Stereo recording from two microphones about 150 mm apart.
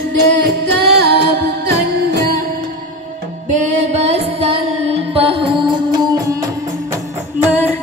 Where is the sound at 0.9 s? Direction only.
90° right.